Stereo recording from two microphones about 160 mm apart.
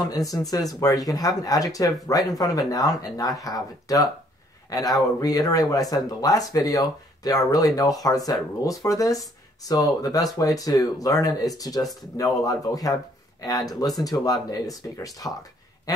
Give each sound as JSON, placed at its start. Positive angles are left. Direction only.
{"t": 0.0, "sound": "speech", "side_deg": 20}